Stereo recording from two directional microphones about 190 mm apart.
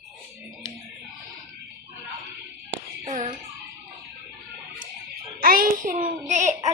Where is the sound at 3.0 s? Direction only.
40° right (ahead or behind).